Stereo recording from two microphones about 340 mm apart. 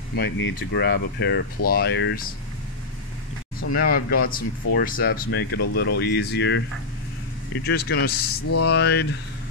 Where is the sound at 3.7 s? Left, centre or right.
Left.